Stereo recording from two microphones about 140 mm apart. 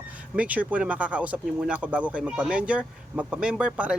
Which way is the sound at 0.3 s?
10° right (ahead or behind).